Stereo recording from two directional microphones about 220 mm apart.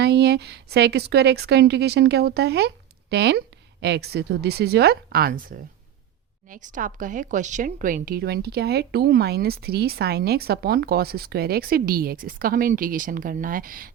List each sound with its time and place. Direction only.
0.0 s a woman's voice: 50° right (ahead or behind)